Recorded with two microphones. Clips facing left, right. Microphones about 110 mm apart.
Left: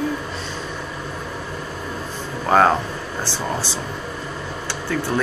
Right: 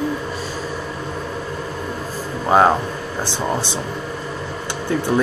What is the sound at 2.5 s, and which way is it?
Speech, 20° right (ahead or behind).